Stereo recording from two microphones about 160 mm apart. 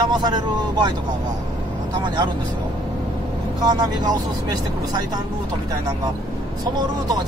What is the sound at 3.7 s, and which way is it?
Speech, 25° right (ahead or behind).